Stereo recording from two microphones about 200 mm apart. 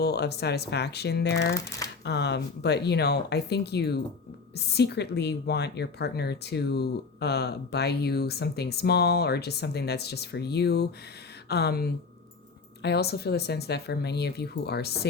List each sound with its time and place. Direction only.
0.0 s speech: 55° left (ahead or behind)